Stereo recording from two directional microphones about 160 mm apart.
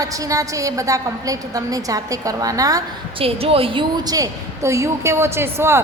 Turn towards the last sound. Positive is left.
turn(degrees=-15)  # may be behind; listen again after turning